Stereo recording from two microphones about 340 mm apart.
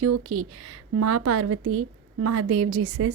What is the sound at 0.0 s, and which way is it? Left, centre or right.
A woman's voice, right.